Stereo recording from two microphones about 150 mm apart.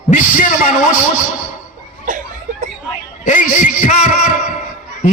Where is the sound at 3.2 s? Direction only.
55° left (ahead or behind).